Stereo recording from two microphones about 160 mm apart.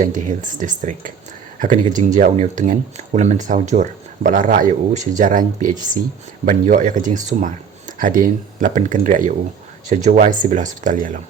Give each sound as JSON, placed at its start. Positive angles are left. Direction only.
{"t": 0.0, "sound": "speech", "side_deg": -55}